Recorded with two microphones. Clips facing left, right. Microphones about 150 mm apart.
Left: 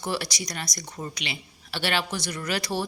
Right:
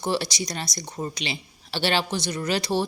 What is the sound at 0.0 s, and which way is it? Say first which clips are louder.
Speech: right 4 dB; 25° right (ahead or behind).